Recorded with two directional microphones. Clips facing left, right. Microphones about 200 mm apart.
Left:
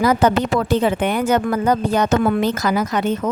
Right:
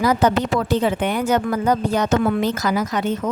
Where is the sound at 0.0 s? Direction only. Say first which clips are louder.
Left 2 dB; 55° left (ahead or behind).